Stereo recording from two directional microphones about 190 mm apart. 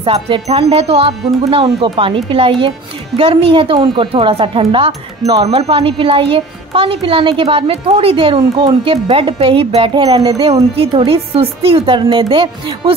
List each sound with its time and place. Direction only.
0.0 s a woman's voice: 30° right (ahead or behind)